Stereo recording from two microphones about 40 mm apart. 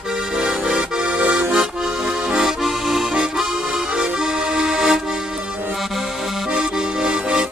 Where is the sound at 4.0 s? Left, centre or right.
Centre.